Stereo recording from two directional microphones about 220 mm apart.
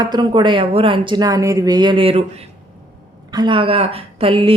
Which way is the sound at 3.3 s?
20° right (ahead or behind).